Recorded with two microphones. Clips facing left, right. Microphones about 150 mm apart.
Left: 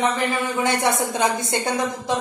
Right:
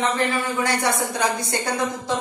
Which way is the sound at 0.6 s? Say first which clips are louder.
Left 2 dB; 20° left (ahead or behind).